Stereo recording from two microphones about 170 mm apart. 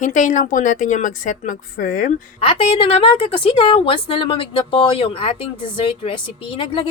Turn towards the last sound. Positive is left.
turn(degrees=30)  # may be behind; listen again after turning